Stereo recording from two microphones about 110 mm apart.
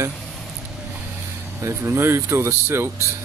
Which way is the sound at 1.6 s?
25° right (ahead or behind).